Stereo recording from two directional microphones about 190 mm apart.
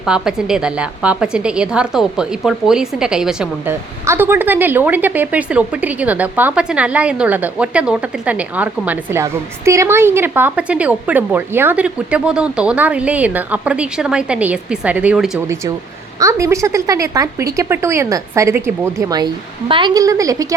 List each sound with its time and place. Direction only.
0.0 s a woman's voice: 5° right (ahead or behind)